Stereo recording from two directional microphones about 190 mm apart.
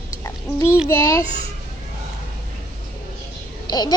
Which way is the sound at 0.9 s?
15° left (ahead or behind).